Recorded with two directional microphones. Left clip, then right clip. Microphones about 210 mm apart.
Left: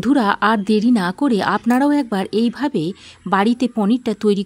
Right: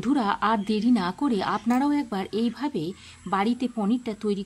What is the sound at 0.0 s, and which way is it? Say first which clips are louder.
A woman's voice: left 8 dB; 30° left (ahead or behind).